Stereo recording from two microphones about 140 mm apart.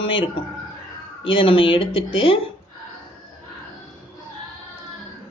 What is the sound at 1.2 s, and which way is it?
Speech, 40° left (ahead or behind).